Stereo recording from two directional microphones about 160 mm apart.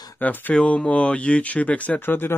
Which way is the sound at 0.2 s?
10° left (ahead or behind).